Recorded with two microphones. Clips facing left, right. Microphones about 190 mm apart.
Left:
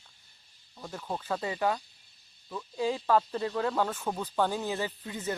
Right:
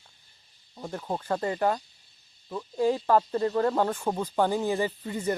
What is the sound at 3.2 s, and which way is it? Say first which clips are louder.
Speech: right 5 dB; 25° right (ahead or behind).